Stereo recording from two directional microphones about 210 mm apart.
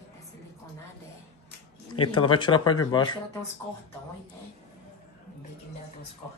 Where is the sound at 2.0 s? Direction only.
25° left (ahead or behind).